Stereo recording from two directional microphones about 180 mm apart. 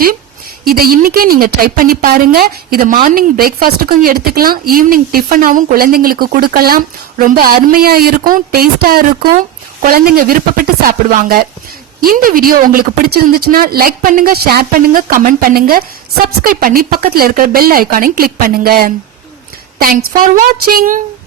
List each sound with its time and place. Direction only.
0.6 s a woman's voice: 55° right (ahead or behind)